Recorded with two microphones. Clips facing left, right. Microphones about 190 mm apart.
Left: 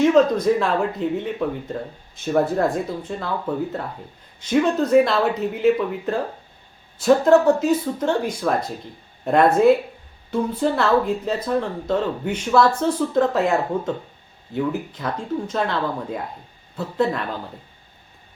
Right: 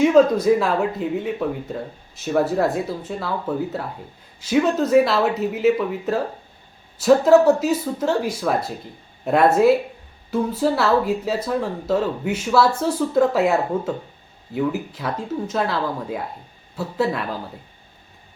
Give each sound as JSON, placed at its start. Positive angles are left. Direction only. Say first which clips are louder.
{"t": 0.0, "sound": "speech", "louder": "right 1 dB", "side_deg": -5}